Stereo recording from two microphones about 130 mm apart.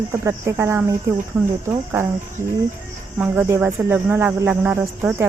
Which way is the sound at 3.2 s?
15° right (ahead or behind).